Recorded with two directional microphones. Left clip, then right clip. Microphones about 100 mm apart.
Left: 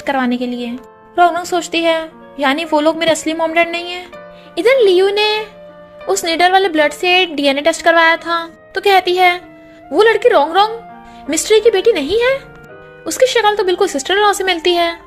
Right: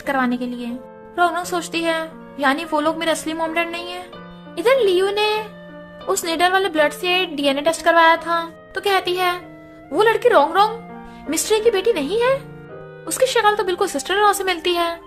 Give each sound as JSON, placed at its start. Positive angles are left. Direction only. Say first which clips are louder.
{"t": 0.0, "sound": "a woman's voice", "louder": "left 4 dB", "side_deg": 35}
{"t": 13.1, "sound": "speech", "louder": "left 4 dB", "side_deg": 30}